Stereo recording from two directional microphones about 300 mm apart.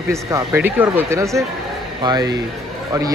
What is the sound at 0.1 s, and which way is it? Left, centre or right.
Speech, centre.